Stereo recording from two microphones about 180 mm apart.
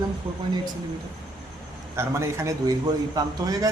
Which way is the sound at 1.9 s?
15° right (ahead or behind).